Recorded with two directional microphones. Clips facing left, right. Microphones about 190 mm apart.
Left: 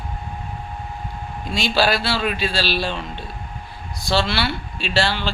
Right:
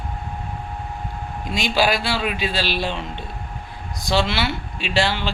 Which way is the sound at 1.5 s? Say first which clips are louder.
Left 1 dB; 15° right (ahead or behind).